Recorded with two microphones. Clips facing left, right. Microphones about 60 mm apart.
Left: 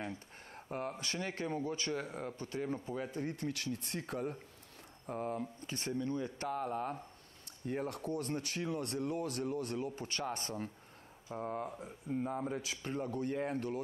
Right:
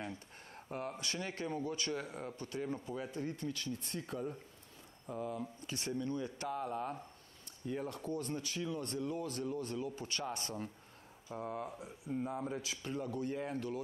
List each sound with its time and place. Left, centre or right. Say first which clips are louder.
0.0 s speech: left 2 dB; left
3.3 s speech: left 2 dB; left
7.6 s speech: left 2 dB; left
12.4 s speech: left 2 dB; centre
12.6 s speech: left 1 dB; left